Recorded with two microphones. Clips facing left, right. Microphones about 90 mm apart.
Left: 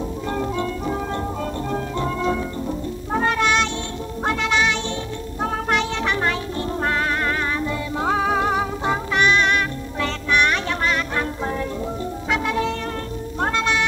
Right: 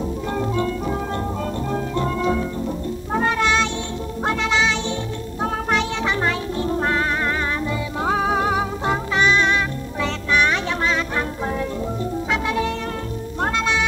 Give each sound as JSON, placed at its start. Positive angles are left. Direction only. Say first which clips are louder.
{"t": 0.3, "sound": "music", "louder": "right 1 dB", "side_deg": 0}
{"t": 4.4, "sound": "music", "louder": "even", "side_deg": -15}
{"t": 8.0, "sound": "music", "louder": "even", "side_deg": -5}
{"t": 9.2, "sound": "music", "louder": "even", "side_deg": -15}
{"t": 12.3, "sound": "music", "louder": "left 2 dB", "side_deg": 0}